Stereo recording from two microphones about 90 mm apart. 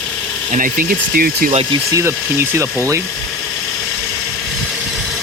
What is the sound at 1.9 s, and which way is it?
Speech, 30° right (ahead or behind).